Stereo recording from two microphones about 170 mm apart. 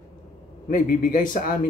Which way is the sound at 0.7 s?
50° left (ahead or behind).